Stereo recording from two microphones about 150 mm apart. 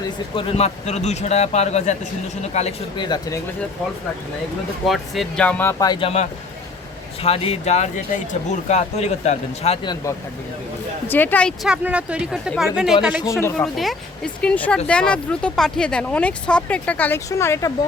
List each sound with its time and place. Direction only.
0.0 s speech: 35° left (ahead or behind)
2.9 s speech: 30° left (ahead or behind)
4.9 s speech: centre (ahead or behind)
5.8 s speech: 30° left (ahead or behind)
7.2 s speech: 40° left (ahead or behind)
9.8 s speech: 30° left (ahead or behind)
11.1 s speech: 10° left (ahead or behind)
11.6 s speech: 5° right (ahead or behind)
14.4 s speech: 10° left (ahead or behind)